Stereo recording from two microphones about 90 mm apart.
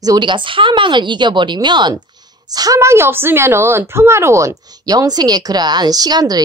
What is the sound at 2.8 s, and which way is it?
Speech, 30° right (ahead or behind).